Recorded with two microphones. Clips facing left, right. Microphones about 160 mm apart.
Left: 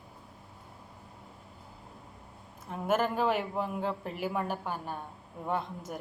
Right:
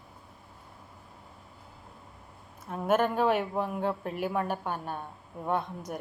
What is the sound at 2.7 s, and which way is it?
Speech, 55° right (ahead or behind).